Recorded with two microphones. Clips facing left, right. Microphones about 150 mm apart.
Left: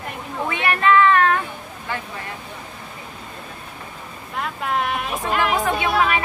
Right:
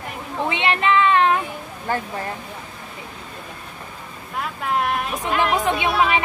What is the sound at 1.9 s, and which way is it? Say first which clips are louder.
Speech: right 5 dB; 45° right (ahead or behind).